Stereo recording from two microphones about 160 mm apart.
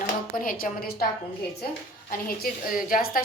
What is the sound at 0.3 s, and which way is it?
Speech, 60° left (ahead or behind).